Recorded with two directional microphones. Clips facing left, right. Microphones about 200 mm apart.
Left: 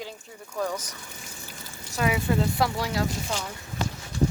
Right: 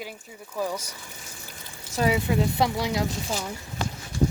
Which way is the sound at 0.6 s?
10° right (ahead or behind).